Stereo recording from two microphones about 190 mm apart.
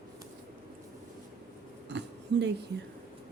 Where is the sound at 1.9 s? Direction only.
65° right (ahead or behind).